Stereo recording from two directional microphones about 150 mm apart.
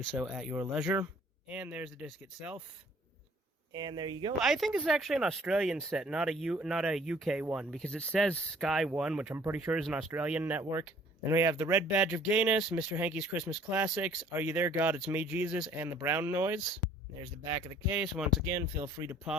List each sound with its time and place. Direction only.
0.0 s speech: centre (ahead or behind)
3.7 s speech: 30° right (ahead or behind)
4.4 s speech: centre (ahead or behind)
7.9 s speech: 5° left (ahead or behind)
9.3 s speech: 15° right (ahead or behind)
9.6 s speech: 5° right (ahead or behind)
17.4 s speech: 25° right (ahead or behind)
17.9 s speech: 5° right (ahead or behind)
18.4 s speech: 20° right (ahead or behind)